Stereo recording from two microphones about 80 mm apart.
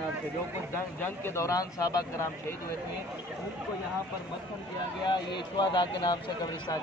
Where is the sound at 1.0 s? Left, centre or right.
Left.